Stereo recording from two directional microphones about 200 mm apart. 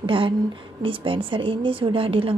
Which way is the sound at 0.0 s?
25° right (ahead or behind).